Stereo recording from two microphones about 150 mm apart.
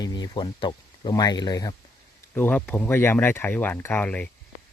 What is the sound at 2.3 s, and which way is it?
Speech, 10° left (ahead or behind).